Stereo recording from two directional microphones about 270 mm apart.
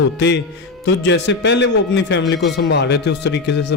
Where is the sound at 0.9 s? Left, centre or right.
Left.